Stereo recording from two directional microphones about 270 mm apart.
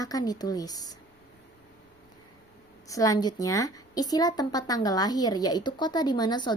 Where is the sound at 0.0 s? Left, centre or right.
Centre.